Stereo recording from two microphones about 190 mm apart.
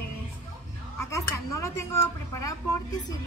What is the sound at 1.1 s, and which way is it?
A woman's voice, 15° left (ahead or behind).